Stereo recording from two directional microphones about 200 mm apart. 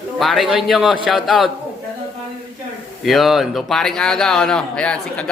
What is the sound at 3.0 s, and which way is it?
A man's voice, centre (ahead or behind).